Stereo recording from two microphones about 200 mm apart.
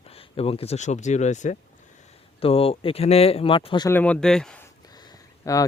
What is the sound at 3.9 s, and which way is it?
Speech, 5° left (ahead or behind).